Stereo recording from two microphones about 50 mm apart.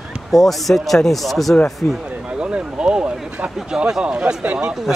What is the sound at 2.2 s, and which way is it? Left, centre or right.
Speech, right.